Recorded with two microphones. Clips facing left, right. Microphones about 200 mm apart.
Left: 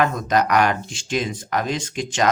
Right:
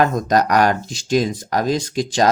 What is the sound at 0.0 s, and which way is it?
Speech, 40° right (ahead or behind).